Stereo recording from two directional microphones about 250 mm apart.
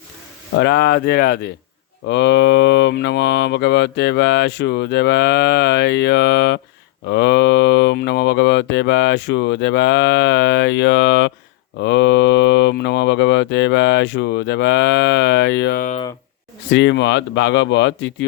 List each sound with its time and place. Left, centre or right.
0.5 s speech: left
2.0 s cattle: left
16.6 s cattle: left